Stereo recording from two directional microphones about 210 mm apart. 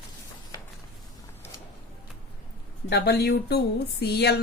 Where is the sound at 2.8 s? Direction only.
50° left (ahead or behind).